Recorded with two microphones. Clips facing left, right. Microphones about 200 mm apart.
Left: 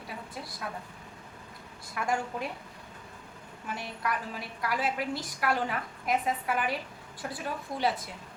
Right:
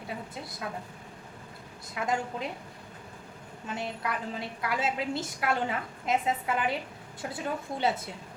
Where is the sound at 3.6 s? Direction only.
25° right (ahead or behind).